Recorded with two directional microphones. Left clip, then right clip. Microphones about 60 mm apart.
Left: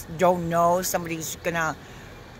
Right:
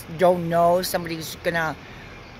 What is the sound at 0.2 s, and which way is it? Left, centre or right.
Speech, right.